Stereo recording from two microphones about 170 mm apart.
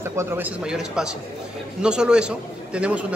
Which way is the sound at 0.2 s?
5° right (ahead or behind).